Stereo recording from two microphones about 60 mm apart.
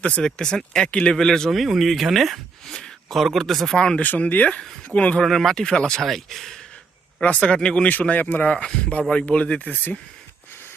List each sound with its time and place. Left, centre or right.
0.0 s speech: centre
3.8 s speech: centre
4.0 s speech: left
5.2 s speech: centre
7.2 s speech: centre
7.9 s speech: left